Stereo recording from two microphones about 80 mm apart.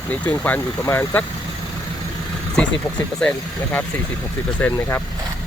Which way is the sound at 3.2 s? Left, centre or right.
Centre.